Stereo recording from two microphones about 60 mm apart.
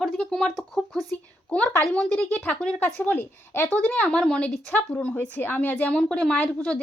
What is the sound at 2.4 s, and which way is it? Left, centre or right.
Speech, centre.